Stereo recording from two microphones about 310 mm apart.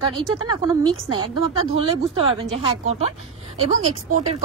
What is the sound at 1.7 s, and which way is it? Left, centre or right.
A woman's voice, centre.